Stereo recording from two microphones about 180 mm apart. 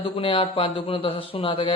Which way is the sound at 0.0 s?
30° left (ahead or behind).